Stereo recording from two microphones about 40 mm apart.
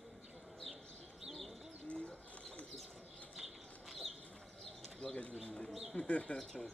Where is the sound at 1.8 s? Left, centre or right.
Left.